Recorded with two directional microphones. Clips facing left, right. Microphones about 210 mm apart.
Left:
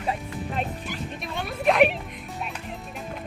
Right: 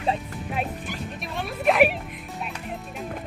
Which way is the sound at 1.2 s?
Centre (ahead or behind).